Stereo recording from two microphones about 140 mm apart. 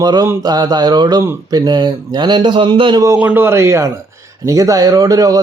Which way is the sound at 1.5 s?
30° right (ahead or behind).